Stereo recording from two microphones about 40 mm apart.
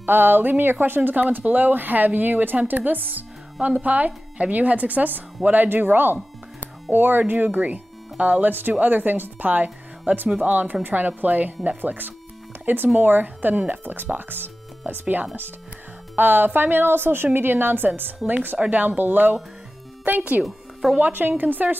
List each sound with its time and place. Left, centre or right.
0.0 s a woman's voice: right
1.3 s speech: right
16.8 s a woman's voice: right